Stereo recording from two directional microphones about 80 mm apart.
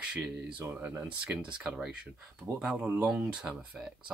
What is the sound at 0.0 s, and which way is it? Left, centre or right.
Speech, centre.